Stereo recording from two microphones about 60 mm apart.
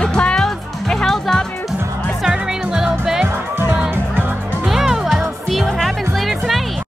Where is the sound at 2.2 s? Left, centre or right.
Centre.